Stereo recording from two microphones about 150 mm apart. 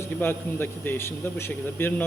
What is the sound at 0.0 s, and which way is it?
A man's voice, 15° left (ahead or behind).